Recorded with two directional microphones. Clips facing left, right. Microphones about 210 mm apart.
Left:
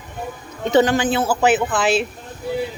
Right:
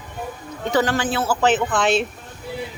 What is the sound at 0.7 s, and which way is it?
A woman's voice, 20° left (ahead or behind).